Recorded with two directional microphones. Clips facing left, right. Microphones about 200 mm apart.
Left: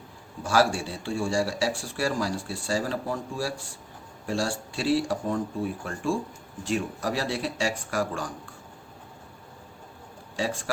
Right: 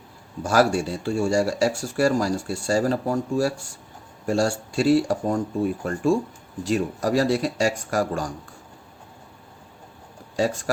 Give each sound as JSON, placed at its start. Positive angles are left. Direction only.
{"t": 0.4, "sound": "speech", "side_deg": -45}
{"t": 10.3, "sound": "speech", "side_deg": -40}